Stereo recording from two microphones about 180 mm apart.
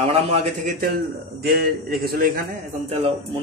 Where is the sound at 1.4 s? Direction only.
60° right (ahead or behind).